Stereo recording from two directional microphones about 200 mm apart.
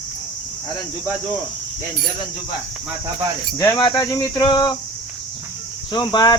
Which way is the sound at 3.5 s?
20° left (ahead or behind).